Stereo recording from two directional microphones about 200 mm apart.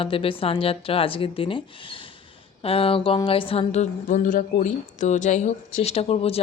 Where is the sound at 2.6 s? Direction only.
30° left (ahead or behind).